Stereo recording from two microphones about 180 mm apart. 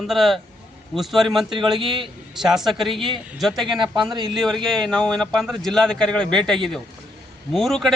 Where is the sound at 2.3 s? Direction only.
Centre (ahead or behind).